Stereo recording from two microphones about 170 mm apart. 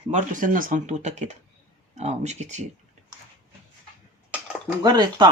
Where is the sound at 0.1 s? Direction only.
50° right (ahead or behind).